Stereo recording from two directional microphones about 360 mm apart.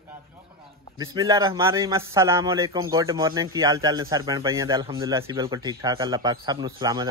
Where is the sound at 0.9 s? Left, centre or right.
Centre.